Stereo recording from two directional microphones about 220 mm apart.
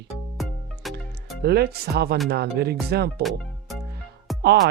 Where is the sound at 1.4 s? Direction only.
45° right (ahead or behind).